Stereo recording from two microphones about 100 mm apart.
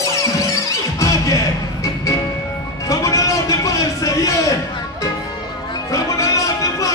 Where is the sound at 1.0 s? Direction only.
35° left (ahead or behind).